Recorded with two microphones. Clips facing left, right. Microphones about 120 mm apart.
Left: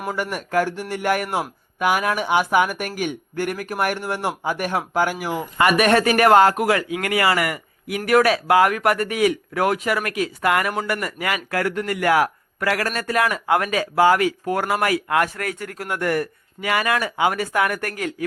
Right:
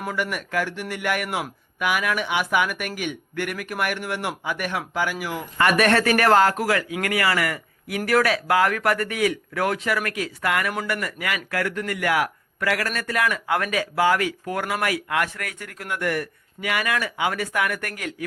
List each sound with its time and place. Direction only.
0.1 s a man's voice: 35° left (ahead or behind)
5.5 s a man's voice: 15° left (ahead or behind); by 18.3 s 30° left (ahead or behind)